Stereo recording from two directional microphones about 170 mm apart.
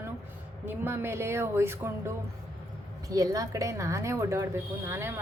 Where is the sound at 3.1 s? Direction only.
20° right (ahead or behind).